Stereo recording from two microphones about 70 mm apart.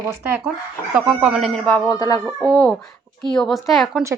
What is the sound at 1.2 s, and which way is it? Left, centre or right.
Speech, centre.